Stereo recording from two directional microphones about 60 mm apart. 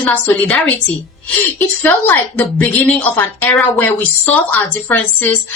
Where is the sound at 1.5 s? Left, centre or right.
Left.